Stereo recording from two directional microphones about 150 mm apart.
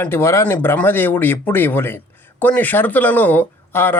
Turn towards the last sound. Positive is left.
turn(degrees=15)  # may be behind; listen again after turning